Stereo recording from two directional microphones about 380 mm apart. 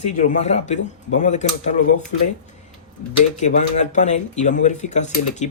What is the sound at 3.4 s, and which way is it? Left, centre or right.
Speech, centre.